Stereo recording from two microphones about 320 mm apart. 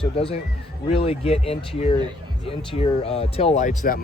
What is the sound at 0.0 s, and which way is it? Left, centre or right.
Speech, centre.